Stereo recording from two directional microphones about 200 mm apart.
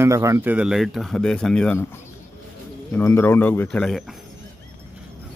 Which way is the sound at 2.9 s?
10° left (ahead or behind).